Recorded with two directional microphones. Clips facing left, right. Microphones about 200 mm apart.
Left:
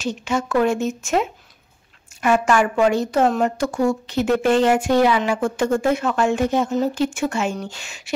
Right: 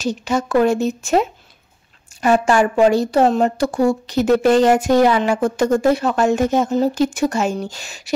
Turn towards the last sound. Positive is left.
turn(degrees=-40)  # may be behind; listen again after turning